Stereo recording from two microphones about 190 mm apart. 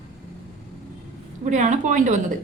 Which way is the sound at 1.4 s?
40° right (ahead or behind).